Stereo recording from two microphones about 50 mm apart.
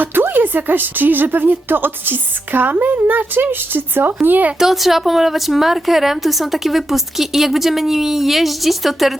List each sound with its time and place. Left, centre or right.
0.0 s a woman's voice: right
4.6 s a woman's voice: centre